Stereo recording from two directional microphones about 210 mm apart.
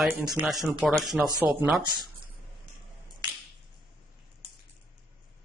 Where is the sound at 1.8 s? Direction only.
20° right (ahead or behind).